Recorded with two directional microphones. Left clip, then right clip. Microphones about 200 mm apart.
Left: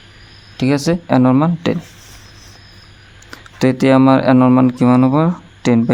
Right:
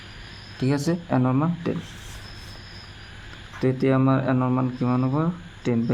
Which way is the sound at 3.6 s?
55° left (ahead or behind).